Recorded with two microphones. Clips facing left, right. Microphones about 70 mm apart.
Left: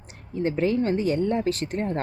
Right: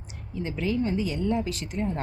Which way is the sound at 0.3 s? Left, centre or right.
Left.